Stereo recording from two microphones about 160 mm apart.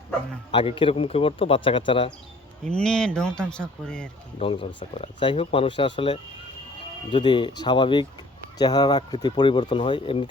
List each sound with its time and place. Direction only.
0.5 s speech: 35° left (ahead or behind)
2.6 s speech: 5° left (ahead or behind)
4.4 s speech: 35° left (ahead or behind)